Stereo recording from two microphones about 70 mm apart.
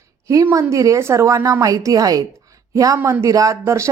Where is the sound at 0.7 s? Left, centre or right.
Right.